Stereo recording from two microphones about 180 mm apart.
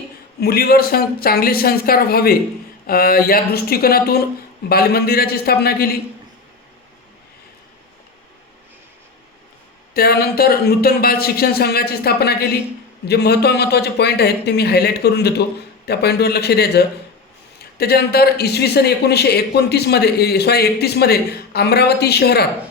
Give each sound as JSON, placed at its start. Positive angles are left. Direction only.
{"t": 0.3, "sound": "a man's voice", "side_deg": 60}
{"t": 9.9, "sound": "a man's voice", "side_deg": 60}